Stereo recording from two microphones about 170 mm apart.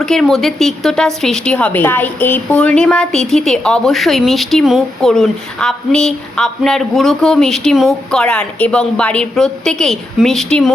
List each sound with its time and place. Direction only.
0.0 s speech: centre (ahead or behind)